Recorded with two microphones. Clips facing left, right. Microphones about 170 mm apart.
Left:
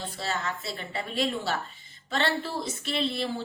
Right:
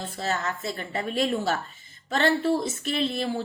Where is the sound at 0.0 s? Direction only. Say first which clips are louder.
Right 3 dB; 45° right (ahead or behind).